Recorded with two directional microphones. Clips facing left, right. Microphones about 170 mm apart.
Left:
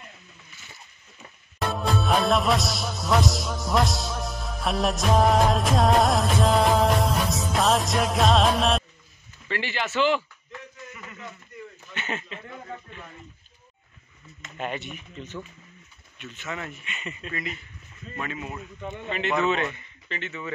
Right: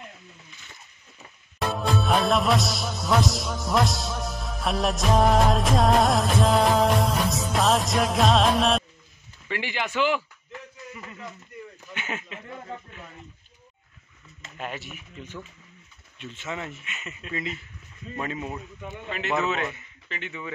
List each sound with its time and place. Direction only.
1.6 s music: centre (ahead or behind)
9.5 s speech: 15° right (ahead or behind)
11.9 s speech: 10° right (ahead or behind)
14.6 s a man's voice: 5° right (ahead or behind)
16.2 s speech: 25° right (ahead or behind)
16.8 s a man's voice: centre (ahead or behind)
18.9 s a man's voice: 5° right (ahead or behind)